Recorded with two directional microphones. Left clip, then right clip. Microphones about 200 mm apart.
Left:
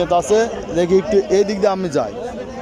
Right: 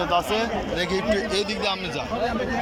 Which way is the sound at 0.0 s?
20° left (ahead or behind).